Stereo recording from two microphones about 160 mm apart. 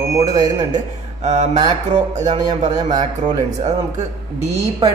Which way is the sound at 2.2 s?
25° right (ahead or behind).